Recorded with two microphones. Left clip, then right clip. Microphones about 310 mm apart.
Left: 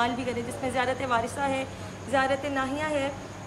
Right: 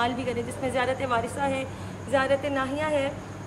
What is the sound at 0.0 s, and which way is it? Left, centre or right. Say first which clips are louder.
A woman's voice: right 1 dB; centre.